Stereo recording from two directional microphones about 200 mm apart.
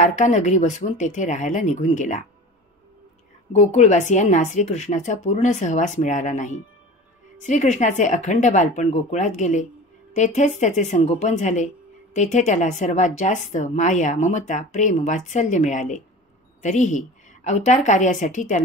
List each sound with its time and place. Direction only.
0.0 s speech: 35° left (ahead or behind)
3.5 s speech: 35° left (ahead or behind)